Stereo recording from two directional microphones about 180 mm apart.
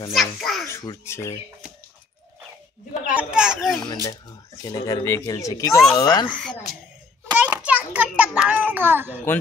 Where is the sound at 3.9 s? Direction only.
20° left (ahead or behind).